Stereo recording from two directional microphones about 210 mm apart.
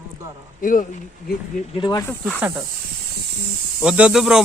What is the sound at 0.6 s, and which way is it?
Speech, 40° left (ahead or behind).